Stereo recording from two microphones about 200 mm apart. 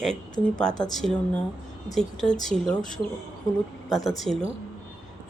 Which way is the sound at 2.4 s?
5° left (ahead or behind).